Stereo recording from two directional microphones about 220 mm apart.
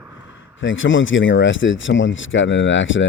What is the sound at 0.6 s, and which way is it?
Speech, 60° left (ahead or behind).